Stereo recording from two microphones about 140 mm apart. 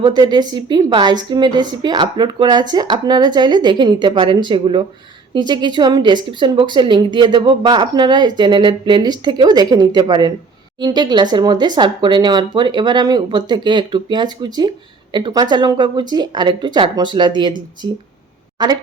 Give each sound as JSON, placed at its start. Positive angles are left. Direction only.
{"t": 0.0, "sound": "a woman's voice", "side_deg": -30}